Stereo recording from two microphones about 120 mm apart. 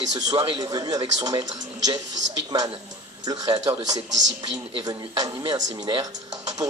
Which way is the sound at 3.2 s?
35° right (ahead or behind).